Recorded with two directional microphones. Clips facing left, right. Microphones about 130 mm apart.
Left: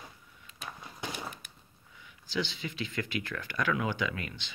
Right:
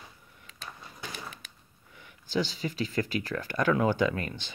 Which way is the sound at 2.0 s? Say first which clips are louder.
Right 4 dB; 50° right (ahead or behind).